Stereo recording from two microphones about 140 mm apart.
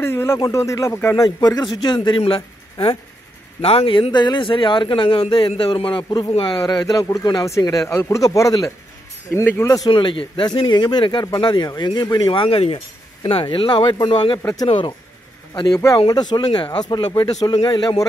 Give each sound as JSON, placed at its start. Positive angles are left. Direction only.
{"t": 0.0, "sound": "a man's voice", "side_deg": 15}
{"t": 9.8, "sound": "a man's voice", "side_deg": 35}
{"t": 14.4, "sound": "speech", "side_deg": 25}
{"t": 14.7, "sound": "a man's voice", "side_deg": 35}